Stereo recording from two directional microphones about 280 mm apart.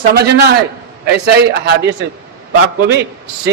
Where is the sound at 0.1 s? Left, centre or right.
Right.